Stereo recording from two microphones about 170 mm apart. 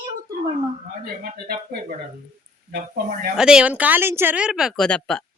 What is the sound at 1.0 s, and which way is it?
Speech, 60° right (ahead or behind).